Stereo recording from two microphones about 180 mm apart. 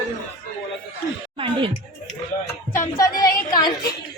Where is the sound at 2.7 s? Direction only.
20° left (ahead or behind).